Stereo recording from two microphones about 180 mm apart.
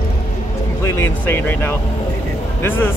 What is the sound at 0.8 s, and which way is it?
Speech, 15° left (ahead or behind).